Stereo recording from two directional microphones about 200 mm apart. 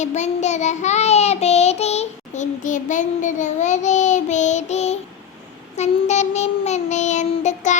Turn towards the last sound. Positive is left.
turn(degrees=35)  # may be behind; listen again after turning